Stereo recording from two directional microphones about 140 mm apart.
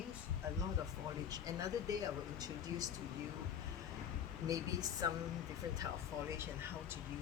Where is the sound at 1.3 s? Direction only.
25° right (ahead or behind).